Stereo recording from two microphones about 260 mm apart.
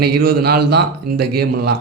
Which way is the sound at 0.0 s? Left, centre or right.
Right.